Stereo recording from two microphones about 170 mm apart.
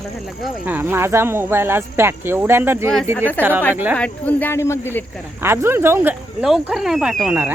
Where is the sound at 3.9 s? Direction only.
10° left (ahead or behind).